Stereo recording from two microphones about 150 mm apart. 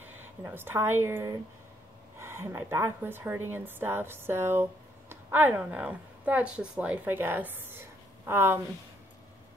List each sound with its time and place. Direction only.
0.4 s a woman's voice: 15° right (ahead or behind)